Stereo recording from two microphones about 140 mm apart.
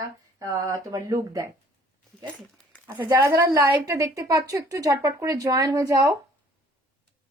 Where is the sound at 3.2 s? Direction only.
25° right (ahead or behind).